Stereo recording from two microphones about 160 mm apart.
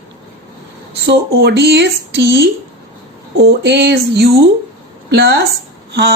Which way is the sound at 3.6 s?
90° right.